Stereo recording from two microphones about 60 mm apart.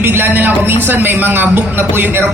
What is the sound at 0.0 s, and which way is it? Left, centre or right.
A man's voice, right.